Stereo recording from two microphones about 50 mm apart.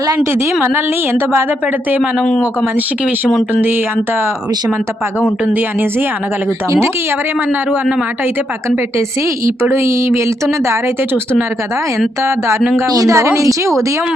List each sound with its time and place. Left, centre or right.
0.3 s a woman's voice: right
2.2 s speech: centre
6.7 s a woman's voice: right
9.6 s a sound: right
13.1 s a woman's voice: right